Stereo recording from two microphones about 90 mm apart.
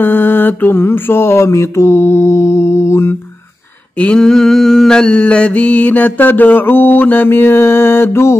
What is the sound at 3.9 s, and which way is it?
Mantra, 15° left (ahead or behind).